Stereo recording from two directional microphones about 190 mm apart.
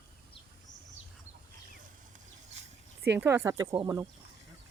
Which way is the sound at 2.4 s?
35° right (ahead or behind).